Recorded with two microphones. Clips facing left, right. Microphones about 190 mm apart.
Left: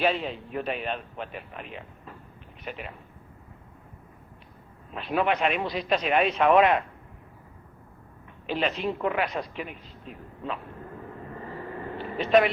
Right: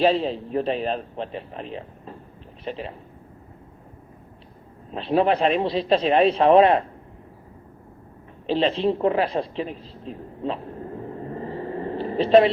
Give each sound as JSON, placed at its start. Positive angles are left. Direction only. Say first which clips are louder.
{"t": 0.0, "sound": "a man's voice", "louder": "right 6 dB", "side_deg": -30}
{"t": 4.9, "sound": "a man's voice", "louder": "right 6 dB", "side_deg": -30}
{"t": 8.4, "sound": "a woman's voice", "louder": "right 7 dB", "side_deg": -30}